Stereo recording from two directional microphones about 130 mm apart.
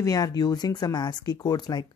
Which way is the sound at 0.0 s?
30° left (ahead or behind).